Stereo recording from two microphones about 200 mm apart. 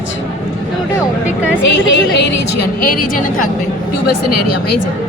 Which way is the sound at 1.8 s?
60° left (ahead or behind).